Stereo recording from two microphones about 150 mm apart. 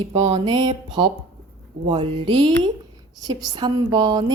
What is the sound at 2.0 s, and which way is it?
Mantra, 30° right (ahead or behind).